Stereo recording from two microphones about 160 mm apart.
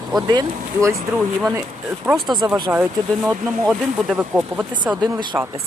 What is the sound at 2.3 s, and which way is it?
Speech, 25° right (ahead or behind).